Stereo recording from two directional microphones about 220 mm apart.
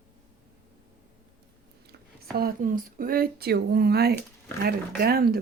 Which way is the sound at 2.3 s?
40° right (ahead or behind).